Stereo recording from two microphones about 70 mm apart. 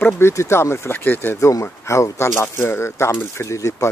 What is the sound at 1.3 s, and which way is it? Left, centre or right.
Speech, left.